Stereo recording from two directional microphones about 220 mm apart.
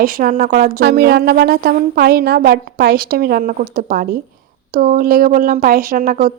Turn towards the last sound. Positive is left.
turn(degrees=-40)  # may be behind; listen again after turning